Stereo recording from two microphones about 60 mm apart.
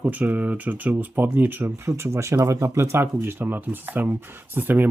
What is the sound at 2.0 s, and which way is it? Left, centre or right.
Speech, right.